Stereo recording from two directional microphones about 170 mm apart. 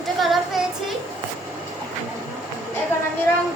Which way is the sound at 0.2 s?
Centre (ahead or behind).